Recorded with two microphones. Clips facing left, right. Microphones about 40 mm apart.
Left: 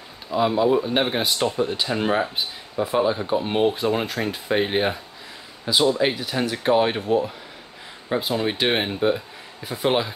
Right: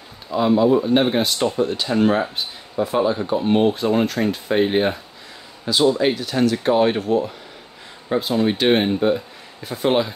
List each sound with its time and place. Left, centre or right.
0.3 s speech: centre
8.1 s speech: centre